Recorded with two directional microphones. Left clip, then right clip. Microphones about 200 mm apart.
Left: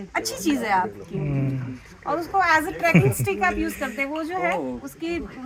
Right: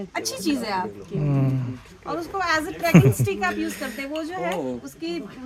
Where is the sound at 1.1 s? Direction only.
35° right (ahead or behind).